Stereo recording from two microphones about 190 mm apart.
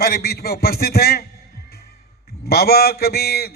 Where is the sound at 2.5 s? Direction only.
55° left (ahead or behind).